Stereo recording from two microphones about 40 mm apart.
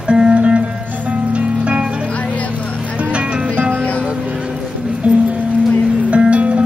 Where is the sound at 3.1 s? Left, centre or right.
Right.